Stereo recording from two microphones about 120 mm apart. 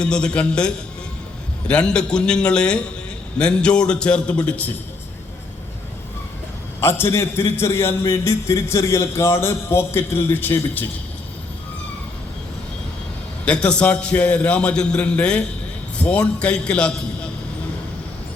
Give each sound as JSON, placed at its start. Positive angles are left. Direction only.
{"t": 0.0, "sound": "a man's voice", "side_deg": 5}
{"t": 6.8, "sound": "a man's voice", "side_deg": 20}
{"t": 13.4, "sound": "a man's voice", "side_deg": 10}